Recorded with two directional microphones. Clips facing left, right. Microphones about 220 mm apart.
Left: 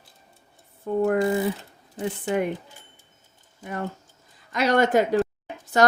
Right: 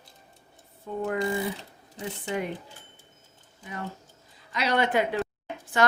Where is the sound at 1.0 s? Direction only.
55° left (ahead or behind).